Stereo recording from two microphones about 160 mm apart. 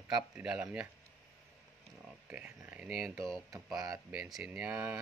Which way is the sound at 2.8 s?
5° right (ahead or behind).